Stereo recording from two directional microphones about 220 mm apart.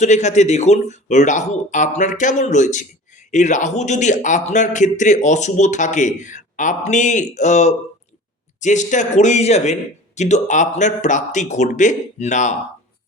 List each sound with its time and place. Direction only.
0.0 s speech: 30° left (ahead or behind)